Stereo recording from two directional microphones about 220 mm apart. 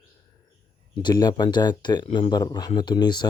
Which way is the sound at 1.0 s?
20° left (ahead or behind).